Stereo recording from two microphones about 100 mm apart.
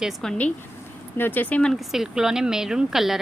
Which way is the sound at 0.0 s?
Centre (ahead or behind).